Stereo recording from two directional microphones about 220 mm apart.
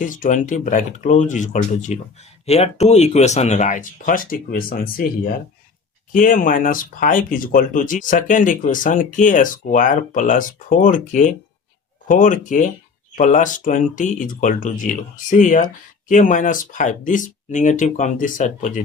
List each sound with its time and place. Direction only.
0.0 s speech: 35° left (ahead or behind)